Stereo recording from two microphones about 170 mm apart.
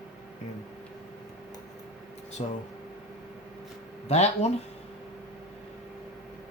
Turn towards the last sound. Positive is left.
turn(degrees=40)  # may be behind; listen again after turning